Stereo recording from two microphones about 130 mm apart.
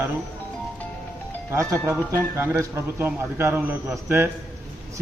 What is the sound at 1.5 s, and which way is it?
A man's voice, 20° right (ahead or behind).